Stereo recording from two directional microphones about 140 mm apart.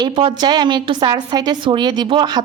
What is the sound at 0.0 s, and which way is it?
A woman's voice, 30° right (ahead or behind).